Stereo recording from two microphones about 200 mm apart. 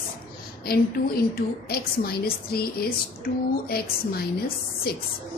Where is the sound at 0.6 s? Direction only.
50° left (ahead or behind).